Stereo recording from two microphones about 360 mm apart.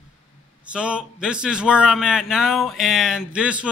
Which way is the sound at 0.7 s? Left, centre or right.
Centre.